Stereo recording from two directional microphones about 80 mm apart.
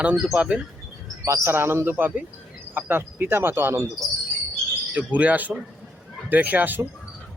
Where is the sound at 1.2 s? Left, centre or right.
Right.